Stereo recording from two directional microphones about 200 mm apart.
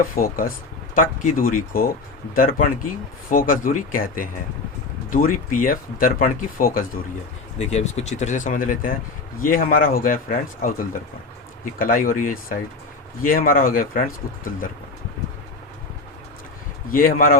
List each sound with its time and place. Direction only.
0.2 s speech: 45° left (ahead or behind)
7.6 s speech: 35° left (ahead or behind)
16.9 s speech: 45° left (ahead or behind)